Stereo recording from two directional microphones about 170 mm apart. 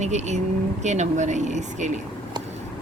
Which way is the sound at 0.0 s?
45° right (ahead or behind).